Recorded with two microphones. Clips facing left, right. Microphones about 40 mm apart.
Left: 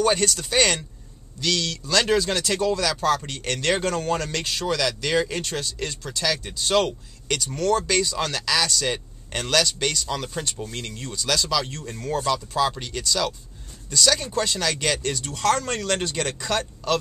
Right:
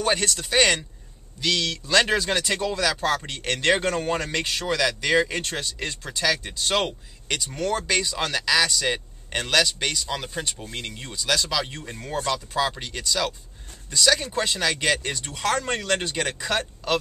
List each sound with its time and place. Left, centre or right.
0.0 s speech: centre
12.3 s speech: centre